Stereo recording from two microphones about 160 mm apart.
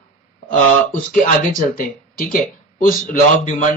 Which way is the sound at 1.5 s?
55° left (ahead or behind).